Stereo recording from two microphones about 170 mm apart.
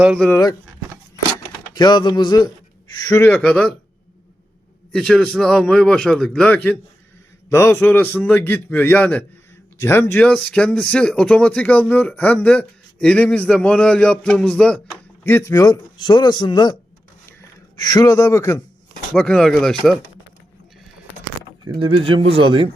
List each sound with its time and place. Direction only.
1.7 s speech: 25° left (ahead or behind); by 3.8 s 5° left (ahead or behind)
4.9 s a man's voice: 5° left (ahead or behind); by 16.7 s 25° left (ahead or behind)
17.7 s speech: 20° left (ahead or behind)
19.1 s a man's voice: 5° left (ahead or behind)
21.8 s a man's voice: 30° right (ahead or behind)